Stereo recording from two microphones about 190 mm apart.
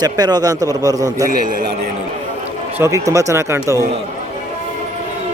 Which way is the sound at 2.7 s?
15° right (ahead or behind).